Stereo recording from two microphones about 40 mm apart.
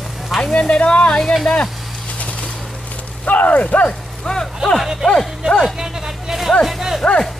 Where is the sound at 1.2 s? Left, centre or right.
Centre.